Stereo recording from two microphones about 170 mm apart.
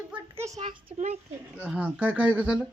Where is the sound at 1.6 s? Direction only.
5° right (ahead or behind).